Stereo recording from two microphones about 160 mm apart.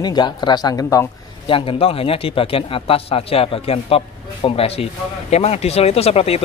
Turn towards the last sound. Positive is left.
turn(degrees=40)  # may be behind; listen again after turning